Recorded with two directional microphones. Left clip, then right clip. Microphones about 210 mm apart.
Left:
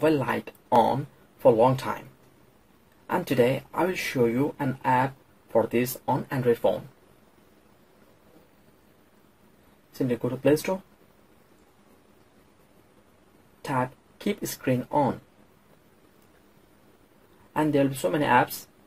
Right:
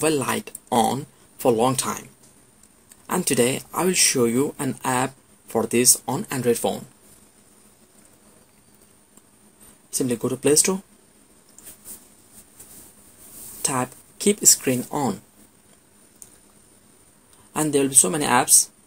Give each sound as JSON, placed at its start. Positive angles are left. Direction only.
{"t": 0.0, "sound": "speech", "side_deg": -50}
{"t": 3.1, "sound": "speech", "side_deg": -50}
{"t": 9.9, "sound": "speech", "side_deg": -50}
{"t": 13.7, "sound": "speech", "side_deg": -50}
{"t": 17.5, "sound": "speech", "side_deg": -50}